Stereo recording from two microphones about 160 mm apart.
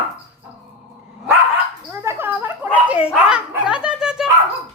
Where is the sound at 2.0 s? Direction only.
15° right (ahead or behind).